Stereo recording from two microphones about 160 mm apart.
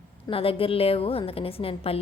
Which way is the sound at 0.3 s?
35° left (ahead or behind).